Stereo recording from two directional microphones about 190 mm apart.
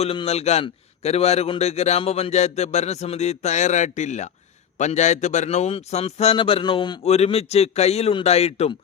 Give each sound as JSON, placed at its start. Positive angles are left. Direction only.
{"t": 0.0, "sound": "a man's voice", "side_deg": 30}